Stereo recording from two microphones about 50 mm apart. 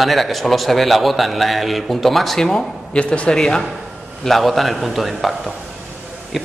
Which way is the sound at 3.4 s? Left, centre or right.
Centre.